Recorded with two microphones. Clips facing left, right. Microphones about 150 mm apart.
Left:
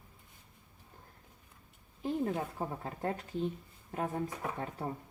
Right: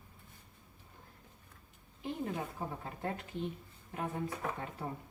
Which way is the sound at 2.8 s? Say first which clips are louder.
Left 3 dB; 35° left (ahead or behind).